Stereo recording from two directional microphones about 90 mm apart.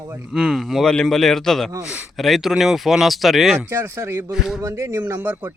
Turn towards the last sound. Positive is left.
turn(degrees=-25)  # may be behind; listen again after turning